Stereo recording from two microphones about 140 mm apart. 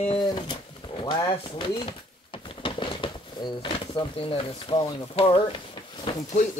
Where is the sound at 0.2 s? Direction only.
35° left (ahead or behind).